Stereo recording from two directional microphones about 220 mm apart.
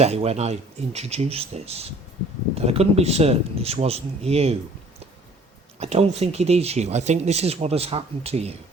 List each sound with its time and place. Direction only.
0.0 s speech: 30° right (ahead or behind)
5.8 s speech: 30° right (ahead or behind)